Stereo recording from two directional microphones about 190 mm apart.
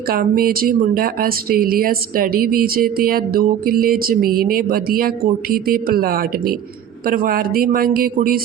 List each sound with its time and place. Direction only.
0.1 s speech: 50° right (ahead or behind)